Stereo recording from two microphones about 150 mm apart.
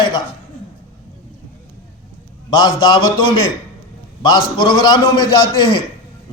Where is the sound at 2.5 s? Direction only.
30° left (ahead or behind).